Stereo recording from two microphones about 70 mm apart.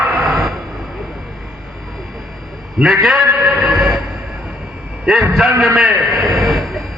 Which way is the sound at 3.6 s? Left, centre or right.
Centre.